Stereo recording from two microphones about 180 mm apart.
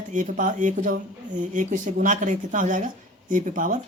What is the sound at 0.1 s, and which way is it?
Speech, 45° right (ahead or behind).